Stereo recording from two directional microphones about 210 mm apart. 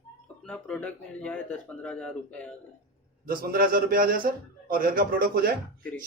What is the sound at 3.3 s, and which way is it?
A man's voice, 45° right (ahead or behind).